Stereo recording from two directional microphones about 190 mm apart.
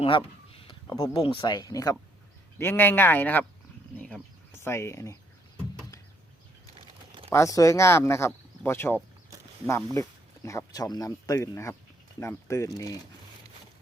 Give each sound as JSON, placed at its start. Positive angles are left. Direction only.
{"t": 0.0, "sound": "speech", "side_deg": 25}
{"t": 6.7, "sound": "typing", "side_deg": -30}
{"t": 7.3, "sound": "speech", "side_deg": 15}